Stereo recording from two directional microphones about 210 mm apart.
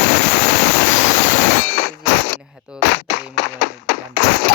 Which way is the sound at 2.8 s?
55° left (ahead or behind).